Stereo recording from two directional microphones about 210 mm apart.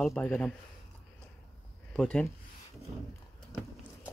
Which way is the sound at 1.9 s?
5° left (ahead or behind).